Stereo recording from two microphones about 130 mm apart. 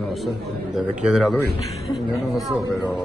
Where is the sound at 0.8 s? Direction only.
5° right (ahead or behind).